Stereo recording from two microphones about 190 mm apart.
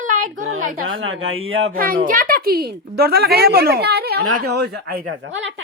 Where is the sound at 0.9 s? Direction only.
90° right.